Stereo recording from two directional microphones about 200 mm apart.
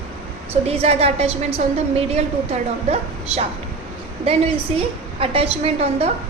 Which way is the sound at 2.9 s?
30° right (ahead or behind).